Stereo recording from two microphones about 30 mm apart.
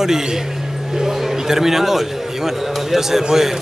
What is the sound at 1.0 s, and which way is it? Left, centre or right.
A man's voice, centre.